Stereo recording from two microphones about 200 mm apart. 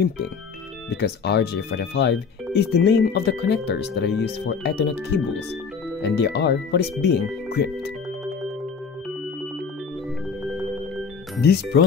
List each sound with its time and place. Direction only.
0.8 s speech: 55° left (ahead or behind)